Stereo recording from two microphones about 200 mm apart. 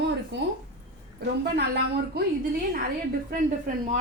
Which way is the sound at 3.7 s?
40° right (ahead or behind).